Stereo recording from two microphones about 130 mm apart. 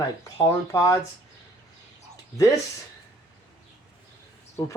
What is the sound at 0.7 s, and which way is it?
Speech, 30° left (ahead or behind).